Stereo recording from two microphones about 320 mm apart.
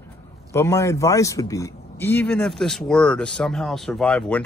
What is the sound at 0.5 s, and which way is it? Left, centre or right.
Speech, centre.